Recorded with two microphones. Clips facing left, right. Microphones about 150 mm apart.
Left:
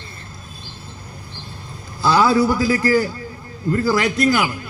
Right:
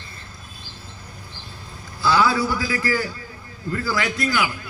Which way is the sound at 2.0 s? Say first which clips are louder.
Left 4 dB; 40° left (ahead or behind).